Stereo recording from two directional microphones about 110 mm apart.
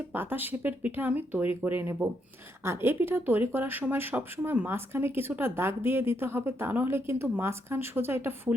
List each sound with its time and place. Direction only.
0.1 s speech: 20° right (ahead or behind)